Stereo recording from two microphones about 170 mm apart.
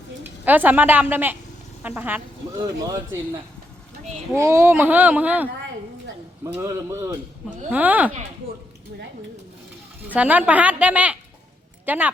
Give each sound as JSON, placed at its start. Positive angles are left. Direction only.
{"t": 0.4, "sound": "speech", "side_deg": -10}
{"t": 2.5, "sound": "speech", "side_deg": -20}
{"t": 6.5, "sound": "speech", "side_deg": -15}
{"t": 10.1, "sound": "speech", "side_deg": -10}